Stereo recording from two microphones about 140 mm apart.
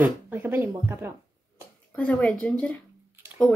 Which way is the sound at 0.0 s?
15° right (ahead or behind).